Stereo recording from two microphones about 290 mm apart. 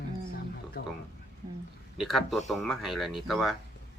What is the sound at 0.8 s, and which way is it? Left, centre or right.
Speech, left.